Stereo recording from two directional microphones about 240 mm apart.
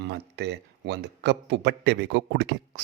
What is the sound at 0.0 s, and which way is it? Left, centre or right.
A man's voice, right.